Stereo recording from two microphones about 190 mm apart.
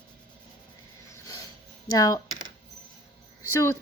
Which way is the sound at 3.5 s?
15° left (ahead or behind).